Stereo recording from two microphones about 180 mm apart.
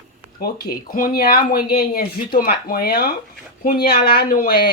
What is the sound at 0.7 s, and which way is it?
Speech, 50° left (ahead or behind).